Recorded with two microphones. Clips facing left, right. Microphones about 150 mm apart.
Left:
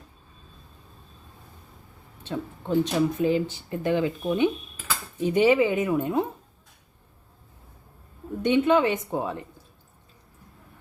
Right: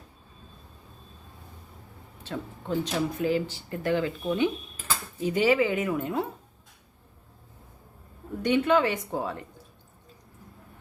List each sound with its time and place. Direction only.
2.2 s speech: 20° left (ahead or behind)
8.4 s speech: 20° left (ahead or behind)